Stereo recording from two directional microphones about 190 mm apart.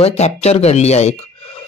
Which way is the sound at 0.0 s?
35° left (ahead or behind).